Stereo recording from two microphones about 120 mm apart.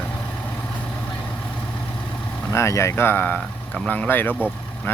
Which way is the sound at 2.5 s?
25° left (ahead or behind).